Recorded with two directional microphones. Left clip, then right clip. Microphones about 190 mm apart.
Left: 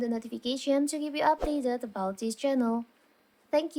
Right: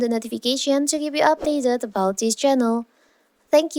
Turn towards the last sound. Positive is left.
turn(degrees=-40)  # may be behind; listen again after turning